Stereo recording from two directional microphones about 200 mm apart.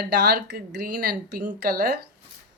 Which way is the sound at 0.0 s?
55° right (ahead or behind).